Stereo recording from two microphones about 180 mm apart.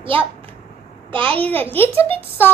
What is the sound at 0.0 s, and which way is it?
A child's voice, 30° right (ahead or behind).